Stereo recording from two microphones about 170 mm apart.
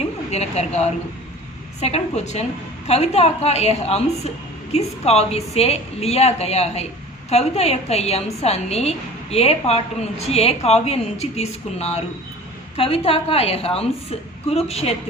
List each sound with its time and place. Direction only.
0.3 s a woman's voice: 40° left (ahead or behind)